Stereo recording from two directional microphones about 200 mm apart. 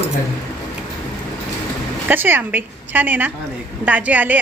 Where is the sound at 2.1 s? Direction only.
10° right (ahead or behind).